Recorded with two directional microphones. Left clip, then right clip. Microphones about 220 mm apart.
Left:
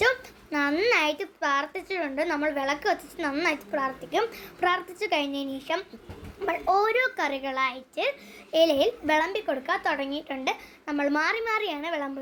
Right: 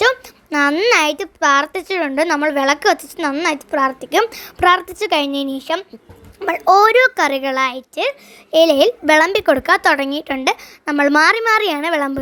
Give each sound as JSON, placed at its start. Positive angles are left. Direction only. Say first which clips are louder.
{"t": 0.0, "sound": "a child's voice", "louder": "right 9 dB", "side_deg": -40}